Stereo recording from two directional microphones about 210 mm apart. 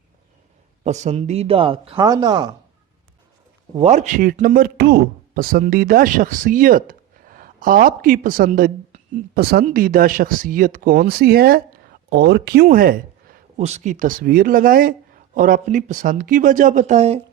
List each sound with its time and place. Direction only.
0.9 s speech: 35° right (ahead or behind)
3.8 s speech: 35° right (ahead or behind)